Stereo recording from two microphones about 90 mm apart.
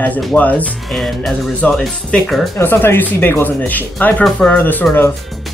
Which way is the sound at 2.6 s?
25° left (ahead or behind).